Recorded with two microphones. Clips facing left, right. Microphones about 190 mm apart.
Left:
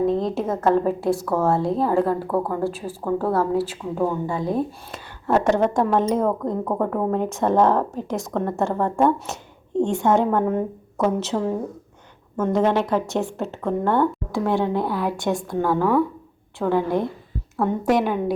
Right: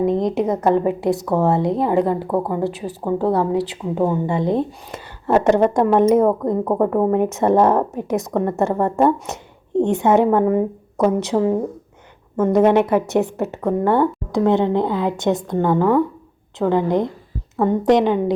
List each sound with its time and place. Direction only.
0.0 s a woman's voice: 20° right (ahead or behind)